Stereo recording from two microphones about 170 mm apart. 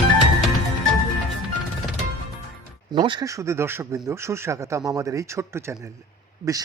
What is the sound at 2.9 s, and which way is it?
Speech, 25° right (ahead or behind).